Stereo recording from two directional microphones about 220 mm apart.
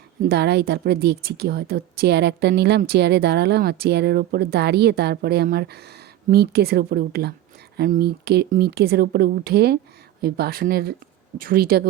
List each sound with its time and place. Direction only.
0.2 s a woman's voice: 45° right (ahead or behind)